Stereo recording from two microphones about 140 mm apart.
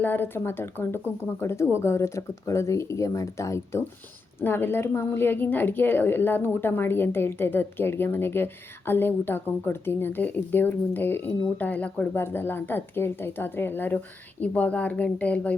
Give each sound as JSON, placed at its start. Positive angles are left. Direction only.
{"t": 0.0, "sound": "speech", "side_deg": 15}